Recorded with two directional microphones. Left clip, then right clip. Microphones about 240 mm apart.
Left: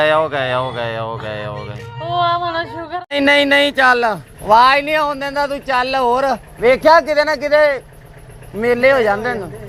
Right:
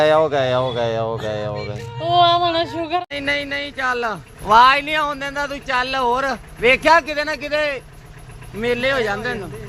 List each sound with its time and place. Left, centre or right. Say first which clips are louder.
0.0 s speech: even; centre
3.1 s speech: left 10 dB; left
4.4 s speech: left 2 dB; centre